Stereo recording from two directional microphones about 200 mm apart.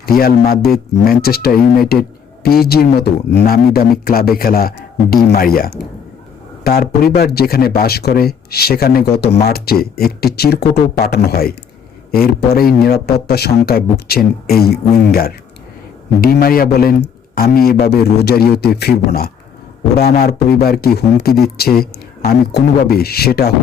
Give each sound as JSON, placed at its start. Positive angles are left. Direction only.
{"t": 0.0, "sound": "speech", "side_deg": 50}